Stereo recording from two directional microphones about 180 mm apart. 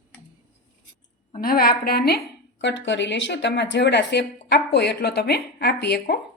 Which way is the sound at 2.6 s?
85° left.